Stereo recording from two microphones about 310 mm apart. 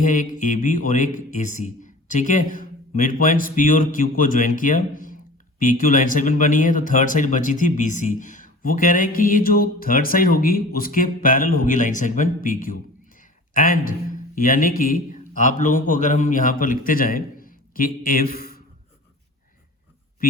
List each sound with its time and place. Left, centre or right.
0.0 s a man's voice: left